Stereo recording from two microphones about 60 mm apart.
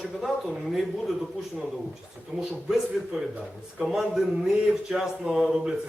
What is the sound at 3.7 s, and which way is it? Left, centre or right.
Speech, centre.